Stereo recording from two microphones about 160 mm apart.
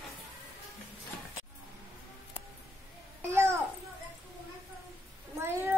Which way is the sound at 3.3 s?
15° right (ahead or behind).